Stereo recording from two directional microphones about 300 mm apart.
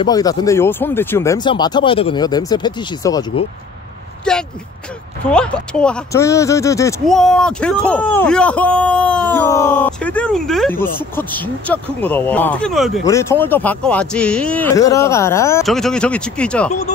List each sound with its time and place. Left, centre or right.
0.0 s speech: centre
4.2 s speech: centre